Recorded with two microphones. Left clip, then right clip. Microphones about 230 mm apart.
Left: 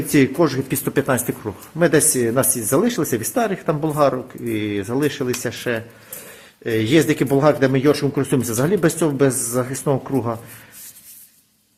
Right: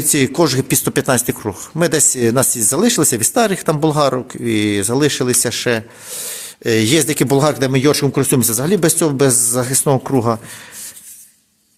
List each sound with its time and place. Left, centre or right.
0.1 s speech: right